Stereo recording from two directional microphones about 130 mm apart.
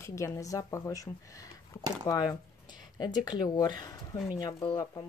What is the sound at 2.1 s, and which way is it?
Speech, 30° left (ahead or behind).